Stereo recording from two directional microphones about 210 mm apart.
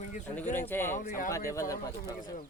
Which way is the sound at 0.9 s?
40° left (ahead or behind).